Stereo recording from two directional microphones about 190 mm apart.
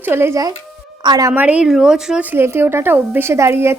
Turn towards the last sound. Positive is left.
turn(degrees=-15)  # may be behind; listen again after turning